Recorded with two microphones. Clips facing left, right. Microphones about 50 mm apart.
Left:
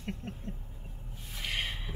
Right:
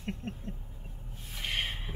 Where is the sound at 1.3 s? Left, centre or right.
Centre.